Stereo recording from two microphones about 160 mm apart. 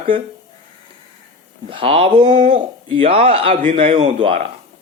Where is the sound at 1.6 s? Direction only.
35° right (ahead or behind).